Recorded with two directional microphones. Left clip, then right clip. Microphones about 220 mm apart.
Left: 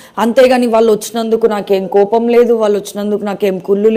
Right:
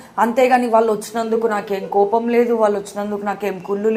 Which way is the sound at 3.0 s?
60° left (ahead or behind).